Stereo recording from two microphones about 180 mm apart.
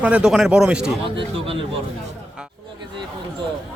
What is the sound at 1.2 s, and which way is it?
Speech, 30° right (ahead or behind).